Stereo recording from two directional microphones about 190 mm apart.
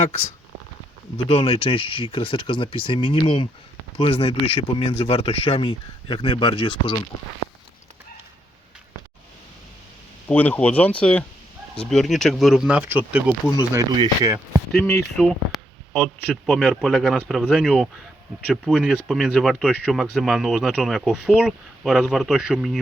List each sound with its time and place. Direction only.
1.1 s speech: 25° left (ahead or behind)
10.2 s speech: 10° left (ahead or behind); by 14.3 s 20° right (ahead or behind)
15.2 s speech: 5° left (ahead or behind)